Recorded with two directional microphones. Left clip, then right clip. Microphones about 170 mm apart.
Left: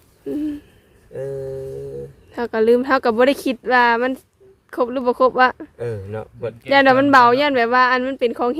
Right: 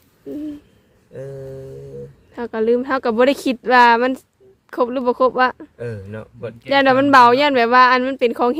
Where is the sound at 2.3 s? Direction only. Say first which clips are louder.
Left 2 dB; 5° left (ahead or behind).